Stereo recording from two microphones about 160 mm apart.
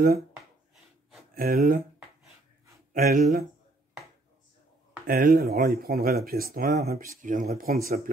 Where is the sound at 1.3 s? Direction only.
65° right (ahead or behind).